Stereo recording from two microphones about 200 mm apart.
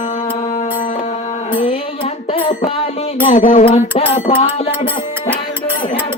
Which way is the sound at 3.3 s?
40° left (ahead or behind).